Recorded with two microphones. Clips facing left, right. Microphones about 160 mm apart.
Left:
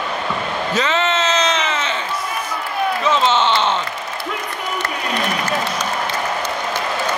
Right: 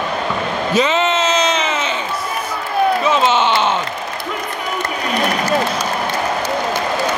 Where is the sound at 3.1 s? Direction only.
10° right (ahead or behind).